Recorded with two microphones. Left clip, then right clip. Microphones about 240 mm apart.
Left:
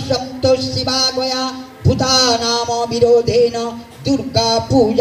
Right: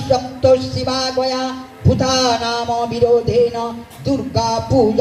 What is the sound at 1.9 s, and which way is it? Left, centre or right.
A man's voice, left.